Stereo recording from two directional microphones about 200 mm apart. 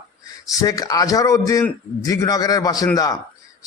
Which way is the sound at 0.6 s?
20° left (ahead or behind).